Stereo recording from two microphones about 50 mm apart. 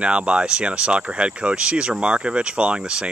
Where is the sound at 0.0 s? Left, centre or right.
Right.